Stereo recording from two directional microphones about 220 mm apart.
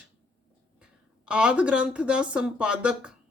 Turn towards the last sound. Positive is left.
turn(degrees=-5)  # may be behind; listen again after turning